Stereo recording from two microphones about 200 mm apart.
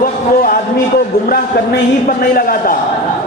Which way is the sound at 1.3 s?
50° left (ahead or behind).